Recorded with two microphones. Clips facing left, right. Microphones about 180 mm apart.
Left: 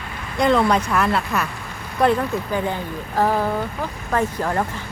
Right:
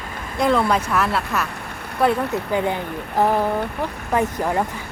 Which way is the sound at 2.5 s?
20° right (ahead or behind).